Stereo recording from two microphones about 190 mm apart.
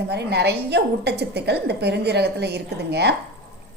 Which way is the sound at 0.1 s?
60° right (ahead or behind).